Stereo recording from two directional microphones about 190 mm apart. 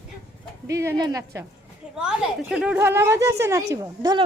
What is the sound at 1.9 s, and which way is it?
A woman's voice, 5° right (ahead or behind).